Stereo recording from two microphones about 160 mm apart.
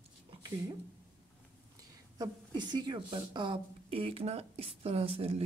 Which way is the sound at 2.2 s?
25° right (ahead or behind).